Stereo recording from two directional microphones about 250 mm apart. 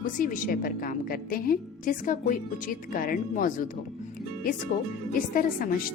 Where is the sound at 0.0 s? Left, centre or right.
Left.